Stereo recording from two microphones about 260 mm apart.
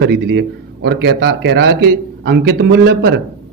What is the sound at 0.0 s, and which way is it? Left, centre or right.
A man's voice, right.